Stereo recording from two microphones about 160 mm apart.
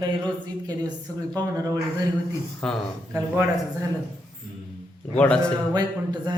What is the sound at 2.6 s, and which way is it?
Speech, 5° left (ahead or behind).